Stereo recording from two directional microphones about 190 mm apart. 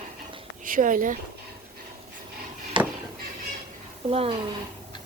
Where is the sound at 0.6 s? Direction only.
45° right (ahead or behind).